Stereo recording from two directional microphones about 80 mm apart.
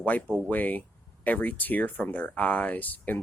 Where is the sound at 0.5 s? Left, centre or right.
Left.